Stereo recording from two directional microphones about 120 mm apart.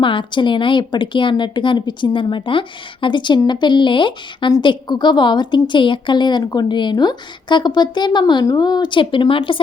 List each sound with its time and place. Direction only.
0.0 s a woman's voice: 45° left (ahead or behind)